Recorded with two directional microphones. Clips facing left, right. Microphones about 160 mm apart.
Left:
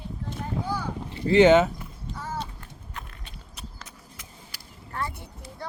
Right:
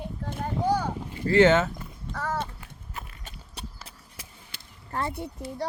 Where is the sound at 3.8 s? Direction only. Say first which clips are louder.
Left 1 dB; 30° right (ahead or behind).